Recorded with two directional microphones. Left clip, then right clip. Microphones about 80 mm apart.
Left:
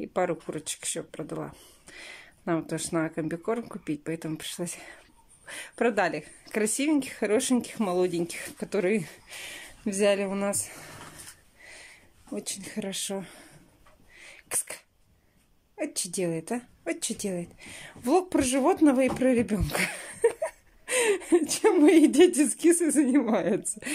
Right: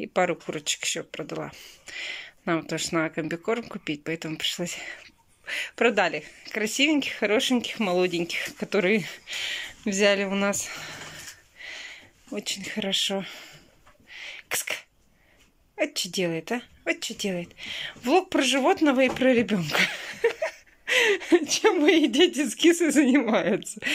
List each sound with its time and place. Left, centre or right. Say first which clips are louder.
0.0 s speech: right 3 dB; left
2.9 s speech: right 2 dB; centre
10.2 s speech: right 4 dB; centre
11.6 s a sound: right 9 dB; left
12.4 s a woman's voice: right 6 dB; left
14.1 s a sound: right 6 dB; left
15.8 s a woman's voice: right 5 dB; left
19.0 s speech: right 3 dB; left
19.8 s a sound: right 1 dB; centre
21.8 s speech: left 5 dB; left